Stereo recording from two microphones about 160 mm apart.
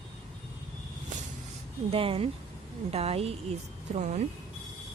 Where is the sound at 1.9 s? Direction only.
35° right (ahead or behind).